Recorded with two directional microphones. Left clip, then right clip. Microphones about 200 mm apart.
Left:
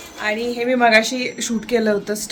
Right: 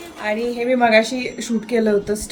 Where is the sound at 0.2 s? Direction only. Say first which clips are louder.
Even; 5° right (ahead or behind).